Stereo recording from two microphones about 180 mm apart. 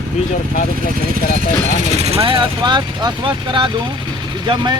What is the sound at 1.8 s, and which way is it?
Speech, 35° right (ahead or behind).